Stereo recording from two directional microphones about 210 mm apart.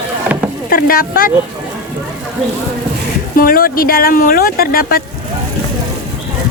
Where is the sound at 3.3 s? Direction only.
45° left (ahead or behind).